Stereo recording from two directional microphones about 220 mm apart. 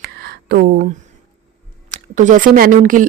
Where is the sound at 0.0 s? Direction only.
45° right (ahead or behind).